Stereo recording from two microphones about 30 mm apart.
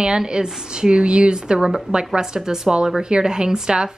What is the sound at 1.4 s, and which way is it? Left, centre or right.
A woman's voice, right.